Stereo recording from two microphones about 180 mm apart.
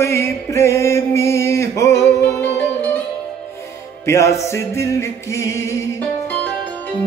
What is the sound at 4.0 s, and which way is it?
Music, 15° left (ahead or behind).